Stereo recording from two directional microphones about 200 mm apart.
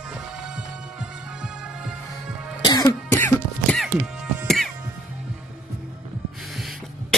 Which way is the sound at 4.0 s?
5° right (ahead or behind).